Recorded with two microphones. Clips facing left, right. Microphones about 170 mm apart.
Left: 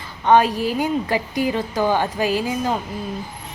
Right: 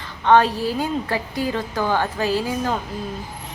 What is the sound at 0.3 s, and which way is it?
A woman's voice, 10° left (ahead or behind).